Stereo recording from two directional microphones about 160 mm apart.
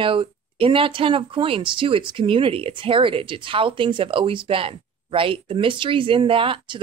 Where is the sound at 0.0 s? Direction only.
35° right (ahead or behind).